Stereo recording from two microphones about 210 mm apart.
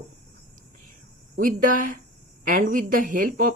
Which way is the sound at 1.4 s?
40° right (ahead or behind).